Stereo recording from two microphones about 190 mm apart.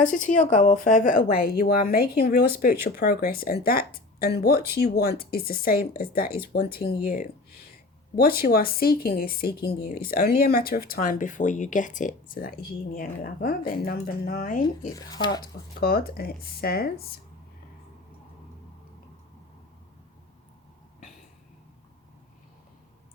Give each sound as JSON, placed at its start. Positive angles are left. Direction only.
{"t": 0.1, "sound": "speech", "side_deg": 45}
{"t": 8.1, "sound": "speech", "side_deg": 50}
{"t": 14.9, "sound": "speech", "side_deg": 20}
{"t": 15.8, "sound": "speech", "side_deg": 50}